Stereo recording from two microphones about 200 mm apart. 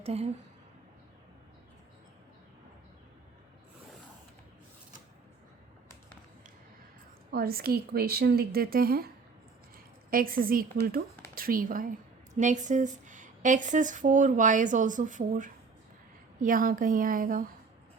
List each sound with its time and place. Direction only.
0.0 s a woman's voice: 30° right (ahead or behind)
7.3 s speech: 50° right (ahead or behind)